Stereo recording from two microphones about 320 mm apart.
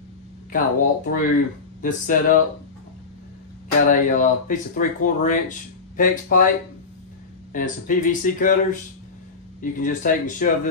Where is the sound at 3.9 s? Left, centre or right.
Left.